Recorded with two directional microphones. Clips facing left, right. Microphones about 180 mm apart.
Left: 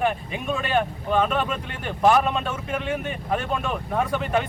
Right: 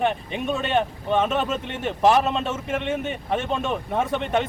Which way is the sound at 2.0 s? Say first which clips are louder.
Even; 25° right (ahead or behind).